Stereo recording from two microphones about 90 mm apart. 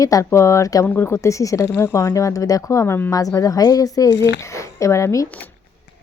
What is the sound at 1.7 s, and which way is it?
Speech, 20° left (ahead or behind).